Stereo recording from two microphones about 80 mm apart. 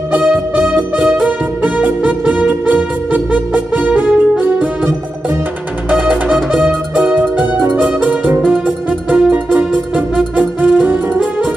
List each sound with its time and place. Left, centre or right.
0.1 s music: right
6.6 s music: right